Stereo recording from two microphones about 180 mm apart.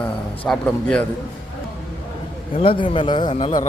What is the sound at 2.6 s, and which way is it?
A man's voice, 30° left (ahead or behind).